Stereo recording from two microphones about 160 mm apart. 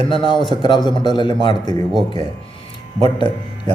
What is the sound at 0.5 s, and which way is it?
A man's voice, 30° left (ahead or behind).